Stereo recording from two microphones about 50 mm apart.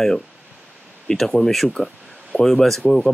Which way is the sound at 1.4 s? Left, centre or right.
Centre.